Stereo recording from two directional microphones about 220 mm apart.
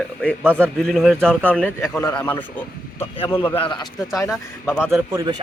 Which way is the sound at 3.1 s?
20° left (ahead or behind).